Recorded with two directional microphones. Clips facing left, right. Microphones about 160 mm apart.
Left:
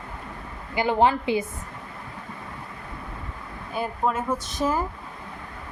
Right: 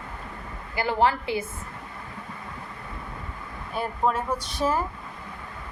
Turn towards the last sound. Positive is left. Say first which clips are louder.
# left 1 dB
turn(degrees=0)  # may be behind; listen again after turning